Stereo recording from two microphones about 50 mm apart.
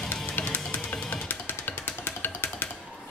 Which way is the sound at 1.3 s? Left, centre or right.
Left.